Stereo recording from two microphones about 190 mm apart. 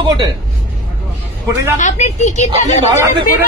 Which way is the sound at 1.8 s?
40° left (ahead or behind).